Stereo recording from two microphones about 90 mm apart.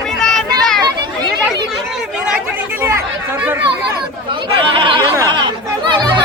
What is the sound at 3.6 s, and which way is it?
Speech, 65° right (ahead or behind).